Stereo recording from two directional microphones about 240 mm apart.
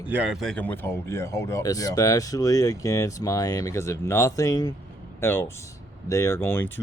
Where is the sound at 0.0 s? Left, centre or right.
Centre.